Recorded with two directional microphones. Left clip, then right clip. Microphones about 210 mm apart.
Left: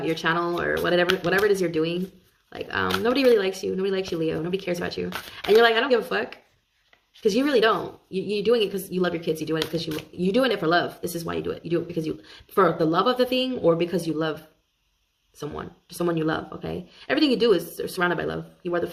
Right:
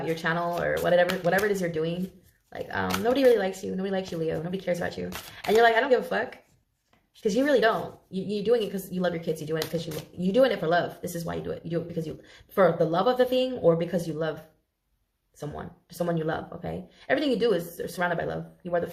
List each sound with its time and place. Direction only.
0.1 s speech: 45° left (ahead or behind)
15.4 s speech: 40° left (ahead or behind)